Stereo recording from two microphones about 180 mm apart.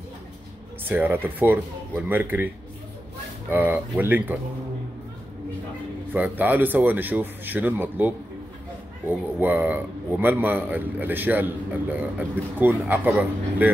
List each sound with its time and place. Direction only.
0.8 s a man's voice: 10° right (ahead or behind)
6.1 s a man's voice: 10° right (ahead or behind)
9.4 s a man's voice: 10° right (ahead or behind)